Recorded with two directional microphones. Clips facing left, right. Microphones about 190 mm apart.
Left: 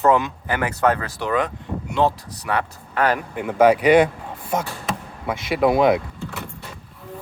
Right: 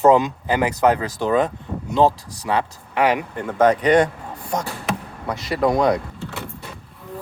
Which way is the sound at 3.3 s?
10° left (ahead or behind).